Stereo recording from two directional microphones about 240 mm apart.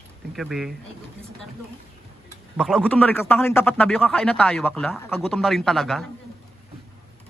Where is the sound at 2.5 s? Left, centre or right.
Centre.